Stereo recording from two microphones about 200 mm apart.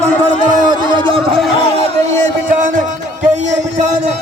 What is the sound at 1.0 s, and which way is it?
Speech, 25° right (ahead or behind).